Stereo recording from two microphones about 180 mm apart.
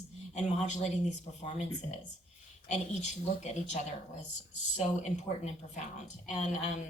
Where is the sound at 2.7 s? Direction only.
40° left (ahead or behind).